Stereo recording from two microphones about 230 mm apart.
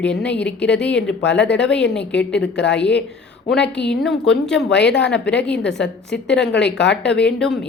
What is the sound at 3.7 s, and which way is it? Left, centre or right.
Speech, centre.